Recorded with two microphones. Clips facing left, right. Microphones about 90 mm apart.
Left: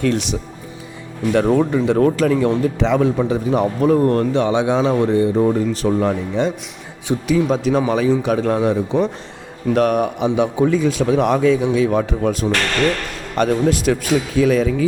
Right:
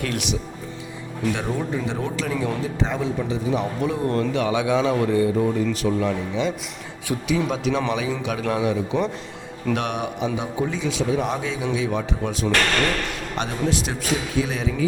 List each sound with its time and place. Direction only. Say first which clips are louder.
0.0 s a man's voice: left 7 dB; 35° left (ahead or behind)
1.3 s speech: left 11 dB; 55° left (ahead or behind)
2.6 s a man's voice: left 8 dB; 65° left (ahead or behind); by 10.2 s 45° left (ahead or behind)
10.3 s a man's voice: left 9 dB; 65° left (ahead or behind)